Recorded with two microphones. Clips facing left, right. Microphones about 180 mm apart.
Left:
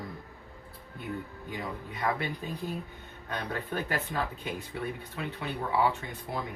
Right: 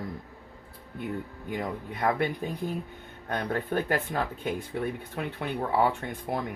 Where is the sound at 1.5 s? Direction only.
50° right (ahead or behind).